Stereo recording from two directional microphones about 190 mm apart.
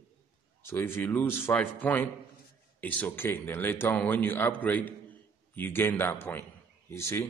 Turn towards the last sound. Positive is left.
turn(degrees=15)  # may be behind; listen again after turning